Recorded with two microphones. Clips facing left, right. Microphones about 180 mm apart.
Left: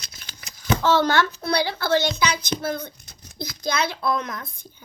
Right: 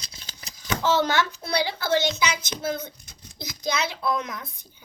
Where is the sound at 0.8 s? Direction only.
15° right (ahead or behind).